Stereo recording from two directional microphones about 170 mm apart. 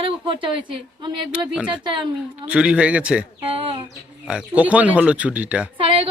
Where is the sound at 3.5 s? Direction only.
35° right (ahead or behind).